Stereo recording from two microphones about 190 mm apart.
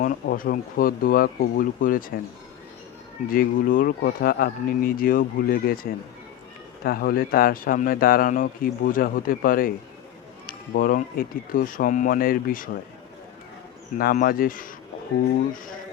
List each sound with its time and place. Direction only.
0.0 s speech: 50° left (ahead or behind)
3.2 s speech: 50° left (ahead or behind)
14.0 s speech: 50° left (ahead or behind)